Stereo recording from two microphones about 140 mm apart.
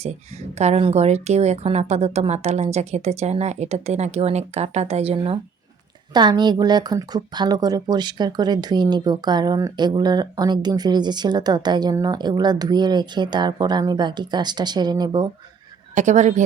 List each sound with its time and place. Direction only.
0.6 s a woman's voice: 50° right (ahead or behind)
6.1 s speech: 30° right (ahead or behind)
16.0 s a woman's voice: 60° right (ahead or behind)